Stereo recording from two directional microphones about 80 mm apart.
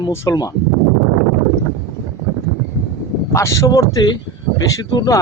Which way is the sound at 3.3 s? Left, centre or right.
Left.